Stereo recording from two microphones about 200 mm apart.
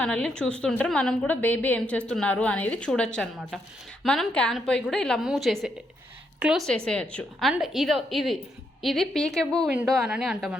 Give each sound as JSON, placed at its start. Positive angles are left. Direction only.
{"t": 0.0, "sound": "a woman's voice", "side_deg": 5}